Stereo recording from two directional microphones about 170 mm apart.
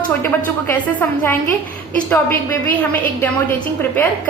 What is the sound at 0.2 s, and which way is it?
A woman's voice, 10° left (ahead or behind).